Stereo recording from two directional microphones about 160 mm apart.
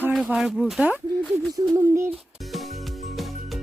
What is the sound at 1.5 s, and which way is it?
Speech, 20° right (ahead or behind).